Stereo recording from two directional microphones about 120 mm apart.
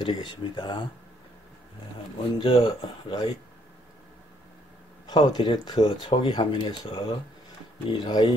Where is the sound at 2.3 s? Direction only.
45° left (ahead or behind).